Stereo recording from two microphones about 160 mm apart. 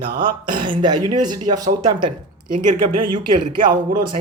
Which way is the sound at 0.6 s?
30° right (ahead or behind).